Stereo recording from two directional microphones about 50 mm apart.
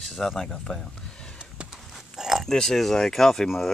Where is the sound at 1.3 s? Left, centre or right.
Centre.